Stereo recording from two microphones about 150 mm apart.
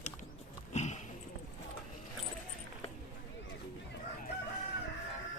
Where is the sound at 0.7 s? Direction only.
50° left (ahead or behind).